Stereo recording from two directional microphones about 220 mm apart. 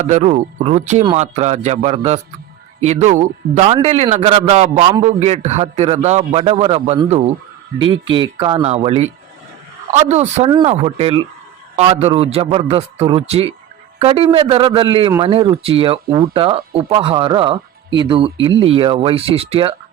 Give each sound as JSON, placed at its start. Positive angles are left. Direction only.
{"t": 0.0, "sound": "speech", "side_deg": -30}